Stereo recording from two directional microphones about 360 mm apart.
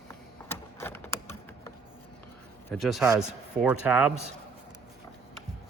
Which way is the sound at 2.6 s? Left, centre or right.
Centre.